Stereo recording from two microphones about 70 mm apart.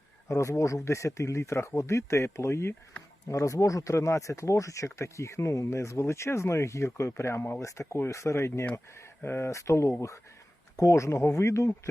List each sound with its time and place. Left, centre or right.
0.3 s speech: left
9.5 s speech: left